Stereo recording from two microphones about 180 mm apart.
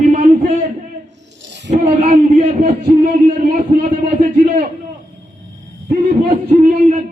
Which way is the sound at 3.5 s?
45° right (ahead or behind).